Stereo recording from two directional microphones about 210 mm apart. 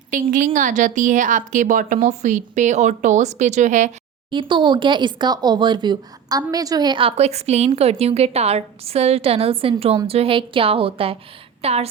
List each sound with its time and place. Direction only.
0.1 s a woman's voice: 40° right (ahead or behind)
4.3 s a woman's voice: 25° right (ahead or behind)